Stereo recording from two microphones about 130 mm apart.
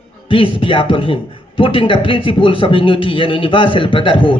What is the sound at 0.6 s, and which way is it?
A man's voice, 45° left (ahead or behind).